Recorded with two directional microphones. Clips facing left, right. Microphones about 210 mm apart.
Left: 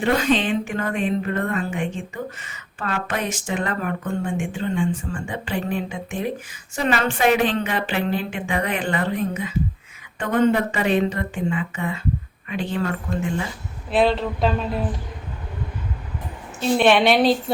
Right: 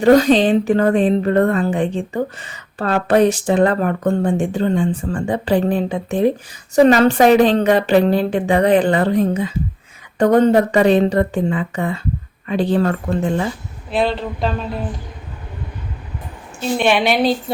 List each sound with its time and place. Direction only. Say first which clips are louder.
0.0 s speech: right 9 dB; 40° right (ahead or behind)
13.9 s speech: even; centre (ahead or behind)
16.6 s speech: even; centre (ahead or behind)